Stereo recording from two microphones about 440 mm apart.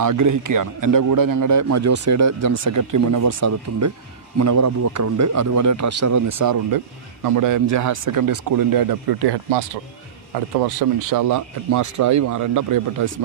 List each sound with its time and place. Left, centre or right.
0.0 s a man's voice: right
10.8 s a man's voice: right